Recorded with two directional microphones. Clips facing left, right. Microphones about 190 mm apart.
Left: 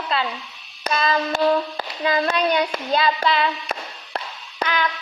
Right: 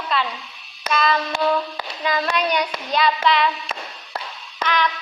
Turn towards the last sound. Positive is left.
turn(degrees=35)  # may be behind; listen again after turning